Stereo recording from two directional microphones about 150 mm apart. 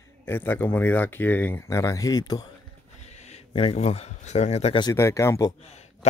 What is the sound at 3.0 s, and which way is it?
Speech, 50° left (ahead or behind).